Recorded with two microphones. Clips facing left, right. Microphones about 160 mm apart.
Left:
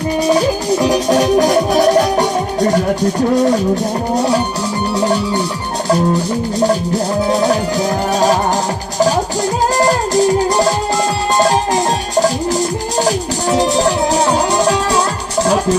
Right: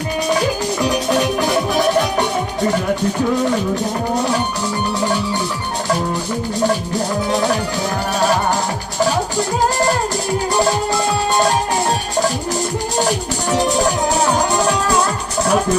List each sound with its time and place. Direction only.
0.3 s music: 35° left (ahead or behind)
7.3 s music: 35° left (ahead or behind)
13.0 s music: 35° left (ahead or behind)